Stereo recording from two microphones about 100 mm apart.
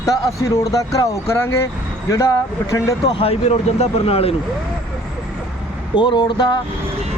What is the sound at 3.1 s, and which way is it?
Speech, 75° left (ahead or behind).